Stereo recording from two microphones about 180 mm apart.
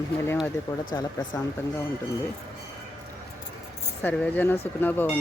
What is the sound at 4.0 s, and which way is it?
Speech, 10° left (ahead or behind).